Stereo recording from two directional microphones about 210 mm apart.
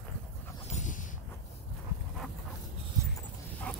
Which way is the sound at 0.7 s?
35° left (ahead or behind).